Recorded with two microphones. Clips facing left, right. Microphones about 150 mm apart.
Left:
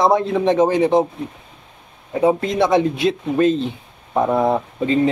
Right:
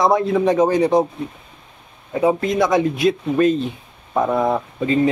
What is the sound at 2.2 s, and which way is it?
Speech, 25° left (ahead or behind).